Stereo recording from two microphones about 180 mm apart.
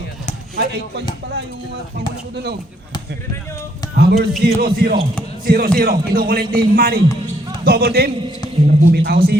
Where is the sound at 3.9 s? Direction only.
60° right (ahead or behind).